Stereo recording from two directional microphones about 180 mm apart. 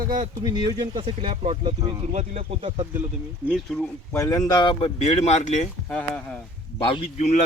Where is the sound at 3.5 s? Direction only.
5° left (ahead or behind).